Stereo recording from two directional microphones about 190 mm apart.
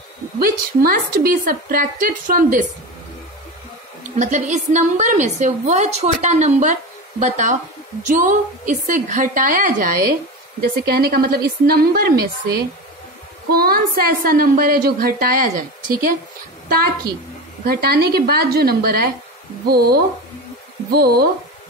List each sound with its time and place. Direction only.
0.4 s a woman's voice: 50° right (ahead or behind)
4.2 s a woman's voice: 40° right (ahead or behind)
16.6 s a woman's voice: 50° right (ahead or behind)